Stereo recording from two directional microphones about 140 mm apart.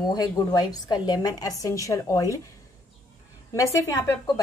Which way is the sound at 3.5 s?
25° left (ahead or behind).